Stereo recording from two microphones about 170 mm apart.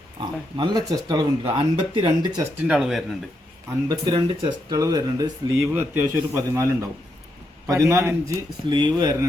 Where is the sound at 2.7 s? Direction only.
Centre (ahead or behind).